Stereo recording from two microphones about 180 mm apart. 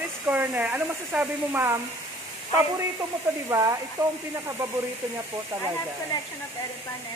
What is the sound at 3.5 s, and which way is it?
Speech, 15° right (ahead or behind).